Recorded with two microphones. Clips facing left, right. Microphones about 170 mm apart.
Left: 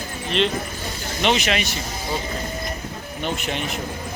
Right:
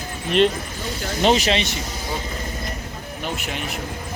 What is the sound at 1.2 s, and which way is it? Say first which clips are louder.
Speech: right 3 dB; 35° right (ahead or behind).